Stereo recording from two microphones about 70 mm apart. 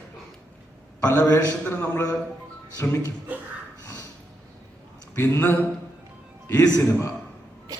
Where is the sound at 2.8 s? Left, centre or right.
Left.